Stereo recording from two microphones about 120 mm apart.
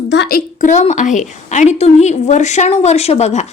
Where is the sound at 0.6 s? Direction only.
80° left.